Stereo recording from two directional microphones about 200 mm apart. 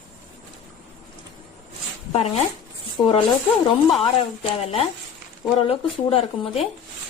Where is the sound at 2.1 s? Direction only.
30° left (ahead or behind).